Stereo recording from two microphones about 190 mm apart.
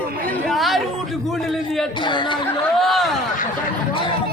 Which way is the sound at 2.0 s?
25° left (ahead or behind).